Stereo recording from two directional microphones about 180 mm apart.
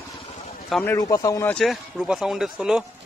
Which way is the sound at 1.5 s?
Centre (ahead or behind).